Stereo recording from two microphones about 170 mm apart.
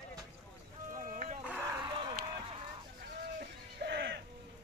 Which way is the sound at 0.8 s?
50° right (ahead or behind).